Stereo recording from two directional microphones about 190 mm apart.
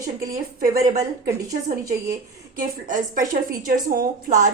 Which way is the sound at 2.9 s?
45° right (ahead or behind).